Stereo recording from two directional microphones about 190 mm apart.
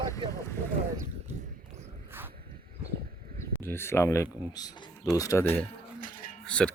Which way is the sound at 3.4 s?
10° left (ahead or behind).